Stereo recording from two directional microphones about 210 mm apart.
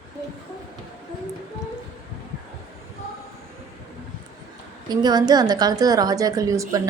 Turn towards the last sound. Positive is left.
turn(degrees=-15)  # may be behind; listen again after turning